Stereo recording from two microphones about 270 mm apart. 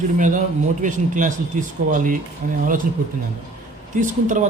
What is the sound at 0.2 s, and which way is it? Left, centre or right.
A man's voice, right.